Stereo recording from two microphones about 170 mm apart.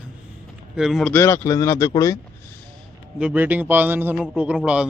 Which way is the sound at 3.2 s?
10° right (ahead or behind).